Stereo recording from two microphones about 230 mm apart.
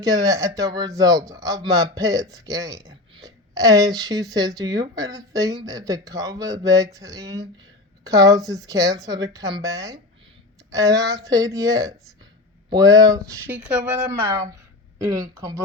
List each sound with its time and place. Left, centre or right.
0.0 s speech: centre